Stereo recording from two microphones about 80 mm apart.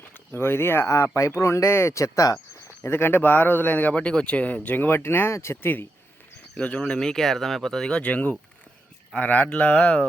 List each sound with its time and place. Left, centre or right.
0.3 s speech: left
2.8 s speech: left
6.5 s speech: centre